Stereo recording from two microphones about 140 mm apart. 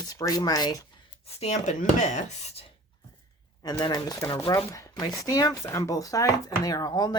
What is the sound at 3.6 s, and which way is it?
Speech, 30° left (ahead or behind).